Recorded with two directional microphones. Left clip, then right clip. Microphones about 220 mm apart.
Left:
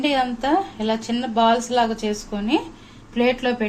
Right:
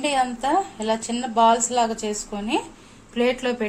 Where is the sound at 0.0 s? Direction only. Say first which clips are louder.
Left 1 dB; 5° right (ahead or behind).